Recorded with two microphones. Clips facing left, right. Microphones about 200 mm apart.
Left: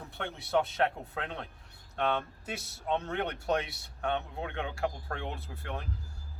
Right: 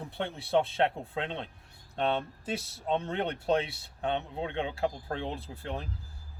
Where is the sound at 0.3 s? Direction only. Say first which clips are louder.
Right 2 dB; 30° right (ahead or behind).